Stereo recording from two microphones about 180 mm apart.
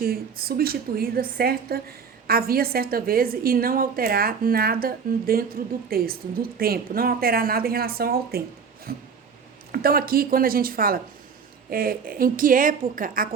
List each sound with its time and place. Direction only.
0.0 s a woman's voice: 55° right (ahead or behind)